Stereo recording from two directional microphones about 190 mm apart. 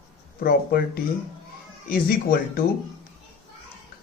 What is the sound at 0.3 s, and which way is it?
Speech, 50° left (ahead or behind).